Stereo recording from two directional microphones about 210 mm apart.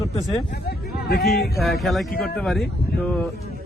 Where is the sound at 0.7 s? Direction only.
50° left (ahead or behind).